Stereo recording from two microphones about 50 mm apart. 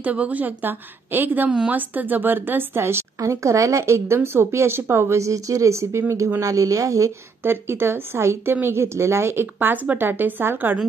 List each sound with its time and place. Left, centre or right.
0.0 s a woman's voice: right
5.1 s speech: right
7.4 s speech: right